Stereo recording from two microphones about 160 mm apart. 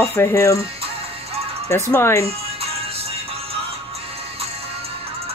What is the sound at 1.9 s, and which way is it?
Speech, 15° left (ahead or behind).